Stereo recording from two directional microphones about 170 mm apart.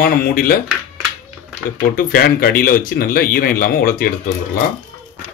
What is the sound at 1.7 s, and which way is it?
Speech, 60° left (ahead or behind).